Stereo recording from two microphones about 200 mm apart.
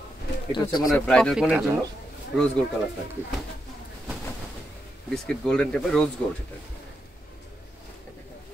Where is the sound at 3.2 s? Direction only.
10° left (ahead or behind).